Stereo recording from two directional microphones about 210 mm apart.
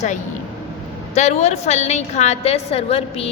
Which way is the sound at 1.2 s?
30° left (ahead or behind).